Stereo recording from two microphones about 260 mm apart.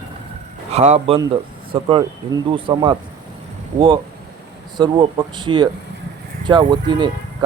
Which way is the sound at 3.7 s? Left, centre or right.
Right.